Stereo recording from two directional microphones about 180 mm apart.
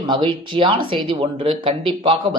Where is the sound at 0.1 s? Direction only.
30° right (ahead or behind).